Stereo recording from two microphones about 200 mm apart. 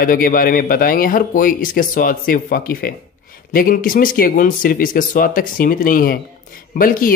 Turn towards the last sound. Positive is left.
turn(degrees=45)  # may be behind; listen again after turning